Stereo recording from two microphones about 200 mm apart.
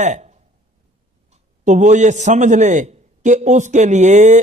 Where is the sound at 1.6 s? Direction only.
35° right (ahead or behind).